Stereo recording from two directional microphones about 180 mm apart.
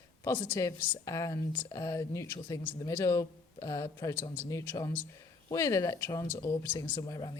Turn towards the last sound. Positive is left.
turn(degrees=20)  # may be behind; listen again after turning